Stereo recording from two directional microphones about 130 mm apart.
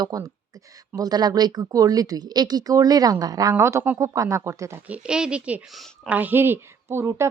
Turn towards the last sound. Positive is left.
turn(degrees=-20)  # may be behind; listen again after turning